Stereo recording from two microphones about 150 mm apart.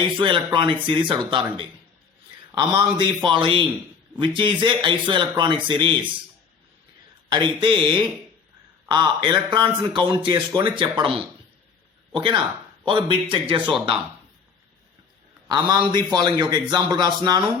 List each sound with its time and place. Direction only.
0.0 s a man's voice: 30° right (ahead or behind)
2.7 s a man's voice: 30° right (ahead or behind)
7.3 s a man's voice: 30° right (ahead or behind)
15.4 s a man's voice: 30° right (ahead or behind)